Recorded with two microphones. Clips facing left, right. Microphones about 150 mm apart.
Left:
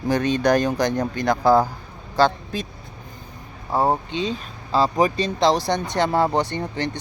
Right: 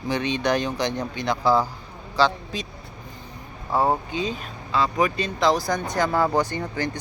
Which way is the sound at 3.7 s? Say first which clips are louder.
Left 1 dB; 25° left (ahead or behind).